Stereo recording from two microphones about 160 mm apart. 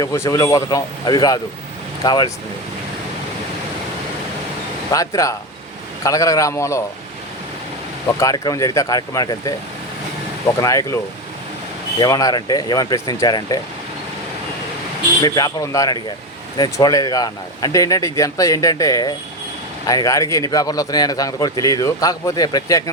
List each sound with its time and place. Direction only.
0.0 s speech: 20° left (ahead or behind)
4.9 s speech: 20° left (ahead or behind)
8.2 s speech: 20° left (ahead or behind)
10.6 s speech: 20° left (ahead or behind)
11.9 s speech: 25° left (ahead or behind)
15.2 s speech: 25° left (ahead or behind)